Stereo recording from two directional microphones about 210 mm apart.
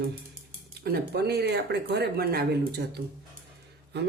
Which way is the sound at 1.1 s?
50° right (ahead or behind).